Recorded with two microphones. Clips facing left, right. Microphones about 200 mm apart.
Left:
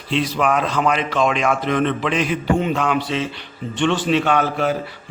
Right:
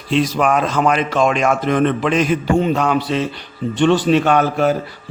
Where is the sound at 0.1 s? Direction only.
45° right (ahead or behind).